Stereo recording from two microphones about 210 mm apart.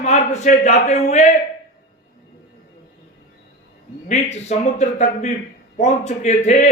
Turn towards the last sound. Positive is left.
turn(degrees=35)  # may be behind; listen again after turning